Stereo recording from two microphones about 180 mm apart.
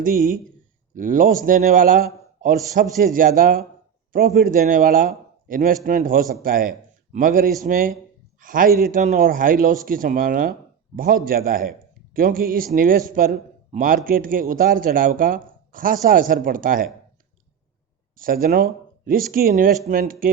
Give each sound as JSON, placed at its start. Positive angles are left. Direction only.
{"t": 0.0, "sound": "a man's voice", "side_deg": -50}
{"t": 18.2, "sound": "a man's voice", "side_deg": -55}